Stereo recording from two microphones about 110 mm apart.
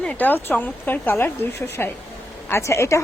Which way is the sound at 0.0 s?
15° left (ahead or behind).